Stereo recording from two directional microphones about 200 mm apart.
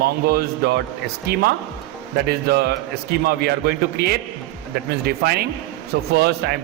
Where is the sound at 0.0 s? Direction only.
50° right (ahead or behind).